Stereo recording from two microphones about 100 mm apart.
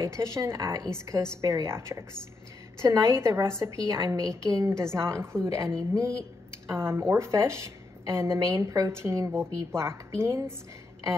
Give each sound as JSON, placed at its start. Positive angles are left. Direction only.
{"t": 0.0, "sound": "a woman's voice", "side_deg": -30}